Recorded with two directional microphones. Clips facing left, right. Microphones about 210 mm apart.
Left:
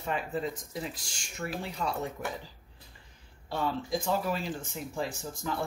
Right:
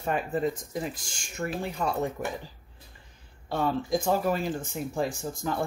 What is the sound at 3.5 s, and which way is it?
Speech, 50° right (ahead or behind).